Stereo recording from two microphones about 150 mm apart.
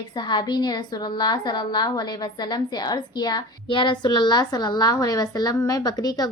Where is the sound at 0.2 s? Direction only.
30° left (ahead or behind).